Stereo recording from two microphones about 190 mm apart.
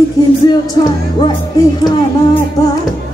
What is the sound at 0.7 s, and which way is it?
Music, 20° left (ahead or behind).